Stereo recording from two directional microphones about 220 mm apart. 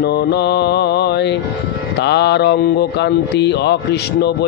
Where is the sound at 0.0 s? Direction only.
50° left (ahead or behind).